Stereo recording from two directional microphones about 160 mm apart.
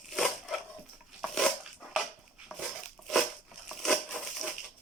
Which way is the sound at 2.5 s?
5° right (ahead or behind).